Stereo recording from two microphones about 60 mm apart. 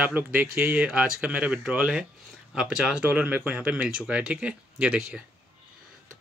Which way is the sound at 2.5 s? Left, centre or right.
Centre.